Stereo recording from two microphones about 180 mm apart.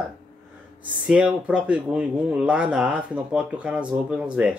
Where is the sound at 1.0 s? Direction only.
5° right (ahead or behind).